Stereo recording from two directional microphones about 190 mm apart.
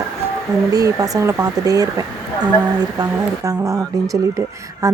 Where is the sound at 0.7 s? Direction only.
20° right (ahead or behind).